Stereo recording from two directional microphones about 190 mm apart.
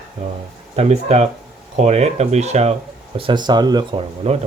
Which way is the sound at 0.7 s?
35° right (ahead or behind).